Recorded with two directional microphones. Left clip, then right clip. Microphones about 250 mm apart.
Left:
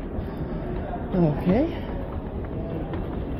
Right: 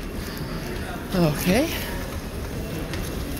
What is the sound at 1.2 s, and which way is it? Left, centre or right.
Speech, centre.